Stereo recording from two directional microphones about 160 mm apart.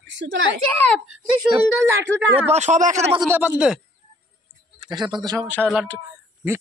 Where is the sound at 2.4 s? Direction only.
45° right (ahead or behind).